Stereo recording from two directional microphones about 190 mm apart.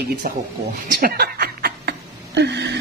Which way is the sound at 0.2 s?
50° right (ahead or behind).